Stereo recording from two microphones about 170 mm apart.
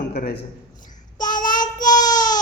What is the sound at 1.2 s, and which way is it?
Child singing, 25° left (ahead or behind).